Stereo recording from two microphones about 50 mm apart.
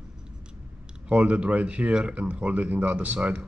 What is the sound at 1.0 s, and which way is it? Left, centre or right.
Speech, right.